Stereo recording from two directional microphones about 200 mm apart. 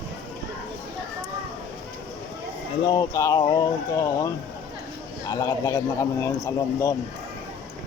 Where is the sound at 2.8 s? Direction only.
20° left (ahead or behind).